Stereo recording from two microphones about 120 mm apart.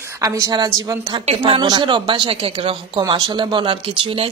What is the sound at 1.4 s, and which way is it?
Speech, 40° right (ahead or behind).